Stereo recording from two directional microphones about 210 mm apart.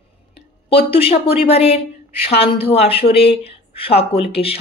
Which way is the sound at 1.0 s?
30° left (ahead or behind).